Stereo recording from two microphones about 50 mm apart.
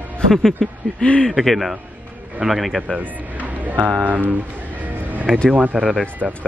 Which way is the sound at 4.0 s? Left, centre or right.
Right.